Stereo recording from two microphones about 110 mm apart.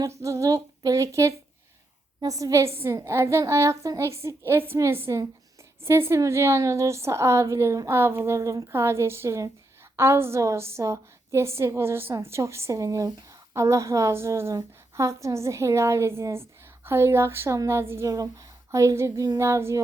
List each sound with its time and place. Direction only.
0.2 s a woman's voice: 30° right (ahead or behind)